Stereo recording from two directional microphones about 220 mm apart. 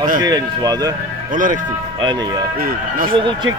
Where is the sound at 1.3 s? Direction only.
35° right (ahead or behind).